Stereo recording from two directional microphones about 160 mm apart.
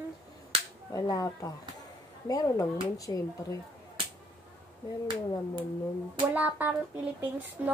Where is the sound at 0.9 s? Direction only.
20° left (ahead or behind).